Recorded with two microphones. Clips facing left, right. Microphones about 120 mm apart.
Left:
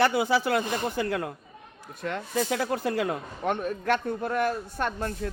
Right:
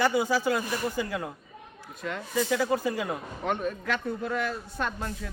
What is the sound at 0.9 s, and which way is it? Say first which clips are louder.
A man's voice: left 3 dB; 65° left (ahead or behind).